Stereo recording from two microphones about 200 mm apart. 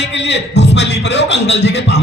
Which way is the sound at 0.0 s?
60° left (ahead or behind).